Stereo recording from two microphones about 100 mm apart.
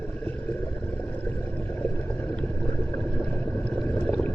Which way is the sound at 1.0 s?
15° left (ahead or behind).